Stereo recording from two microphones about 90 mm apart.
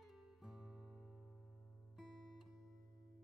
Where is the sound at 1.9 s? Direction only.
Centre (ahead or behind).